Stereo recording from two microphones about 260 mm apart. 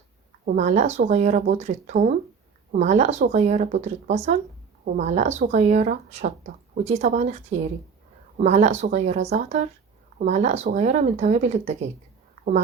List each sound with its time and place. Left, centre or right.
0.4 s speech: right